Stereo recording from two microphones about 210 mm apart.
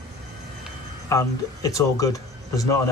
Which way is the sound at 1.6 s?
15° left (ahead or behind).